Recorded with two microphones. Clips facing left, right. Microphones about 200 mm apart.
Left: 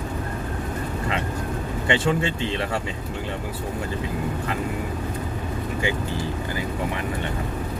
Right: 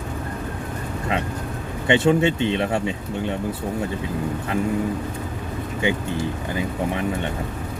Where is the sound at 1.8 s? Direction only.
25° right (ahead or behind).